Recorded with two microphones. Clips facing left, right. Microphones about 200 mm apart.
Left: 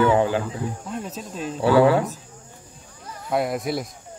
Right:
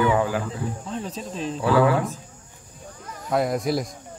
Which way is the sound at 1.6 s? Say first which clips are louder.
Left 3 dB; 30° left (ahead or behind).